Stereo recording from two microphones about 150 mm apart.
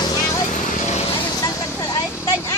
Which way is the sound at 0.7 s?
50° left (ahead or behind).